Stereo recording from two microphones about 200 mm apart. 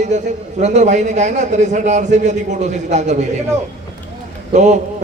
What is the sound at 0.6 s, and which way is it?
A man's voice, 35° right (ahead or behind).